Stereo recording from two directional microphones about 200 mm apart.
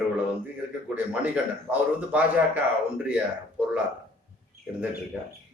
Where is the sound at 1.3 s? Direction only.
5° right (ahead or behind).